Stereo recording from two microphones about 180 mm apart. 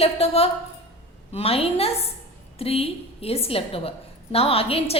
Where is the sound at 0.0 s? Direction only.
35° left (ahead or behind).